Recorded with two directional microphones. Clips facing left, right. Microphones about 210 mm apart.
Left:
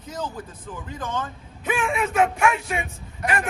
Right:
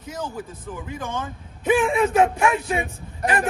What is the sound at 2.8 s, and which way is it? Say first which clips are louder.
Speech: right 4 dB; 35° right (ahead or behind).